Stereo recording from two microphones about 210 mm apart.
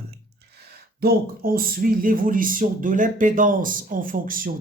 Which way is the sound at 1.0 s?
45° right (ahead or behind).